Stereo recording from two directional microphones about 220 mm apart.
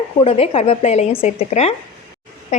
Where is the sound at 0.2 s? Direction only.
25° left (ahead or behind).